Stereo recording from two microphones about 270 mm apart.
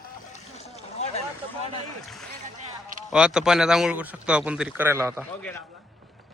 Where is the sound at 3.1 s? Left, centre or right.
Centre.